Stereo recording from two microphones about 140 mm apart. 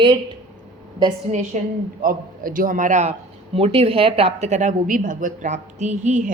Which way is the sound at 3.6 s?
45° right (ahead or behind).